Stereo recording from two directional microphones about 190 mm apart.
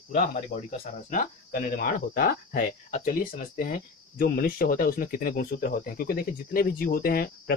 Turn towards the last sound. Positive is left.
turn(degrees=50)  # may be behind; listen again after turning